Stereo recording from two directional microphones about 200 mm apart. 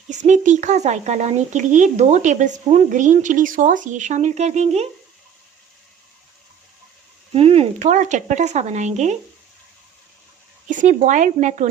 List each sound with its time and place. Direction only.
0.1 s speech: 35° right (ahead or behind)
7.3 s speech: 30° right (ahead or behind)
10.7 s speech: 40° right (ahead or behind)